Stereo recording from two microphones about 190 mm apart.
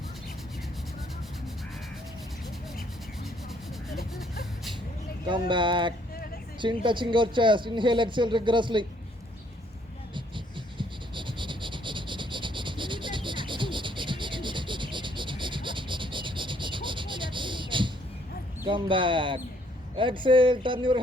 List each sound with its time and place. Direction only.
3.8 s a sound: centre (ahead or behind)
5.3 s speech: 25° right (ahead or behind)
10.2 s frog: 25° right (ahead or behind)
18.7 s speech: 25° right (ahead or behind)